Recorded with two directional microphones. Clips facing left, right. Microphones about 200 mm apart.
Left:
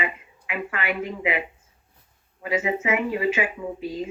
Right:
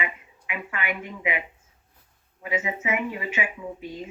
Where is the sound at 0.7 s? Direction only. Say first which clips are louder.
Left 4 dB; 75° left (ahead or behind); by 1.3 s 90° left.